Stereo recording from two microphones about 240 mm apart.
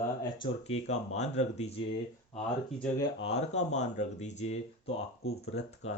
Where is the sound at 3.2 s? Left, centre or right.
Left.